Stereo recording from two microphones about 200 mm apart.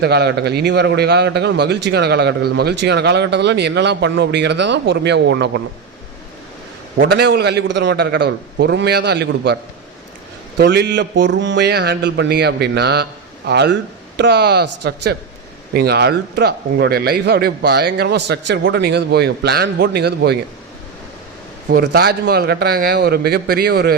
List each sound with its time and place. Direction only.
0.0 s a man's voice: 55° right (ahead or behind)
7.0 s a man's voice: 60° right (ahead or behind)
10.6 s a man's voice: 60° right (ahead or behind)
21.7 s a man's voice: 50° right (ahead or behind)